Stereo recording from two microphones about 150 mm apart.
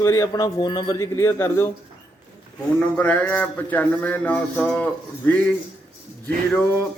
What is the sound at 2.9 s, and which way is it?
Speech, 10° left (ahead or behind).